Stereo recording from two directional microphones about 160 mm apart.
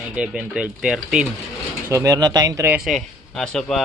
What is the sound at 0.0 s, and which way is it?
Speech, 5° right (ahead or behind).